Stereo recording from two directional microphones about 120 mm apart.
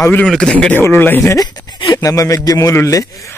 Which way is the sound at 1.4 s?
35° left (ahead or behind).